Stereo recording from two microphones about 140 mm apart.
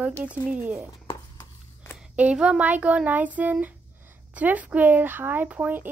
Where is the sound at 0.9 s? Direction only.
25° left (ahead or behind).